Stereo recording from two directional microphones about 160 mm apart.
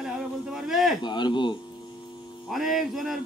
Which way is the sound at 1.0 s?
30° left (ahead or behind).